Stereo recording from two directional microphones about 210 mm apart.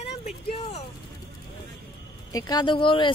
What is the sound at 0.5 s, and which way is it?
Speech, 30° left (ahead or behind).